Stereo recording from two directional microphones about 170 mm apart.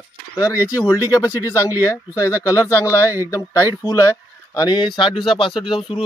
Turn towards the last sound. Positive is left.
turn(degrees=30)  # may be behind; listen again after turning